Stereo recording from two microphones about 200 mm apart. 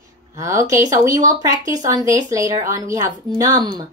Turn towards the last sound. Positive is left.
turn(degrees=-20)  # may be behind; listen again after turning